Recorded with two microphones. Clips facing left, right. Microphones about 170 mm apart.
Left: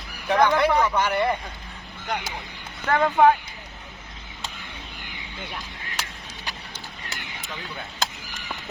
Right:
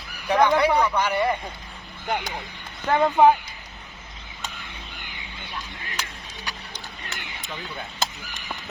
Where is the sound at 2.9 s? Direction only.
15° right (ahead or behind).